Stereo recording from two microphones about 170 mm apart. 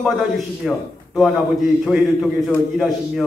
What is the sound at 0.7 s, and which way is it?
A man's voice, centre (ahead or behind).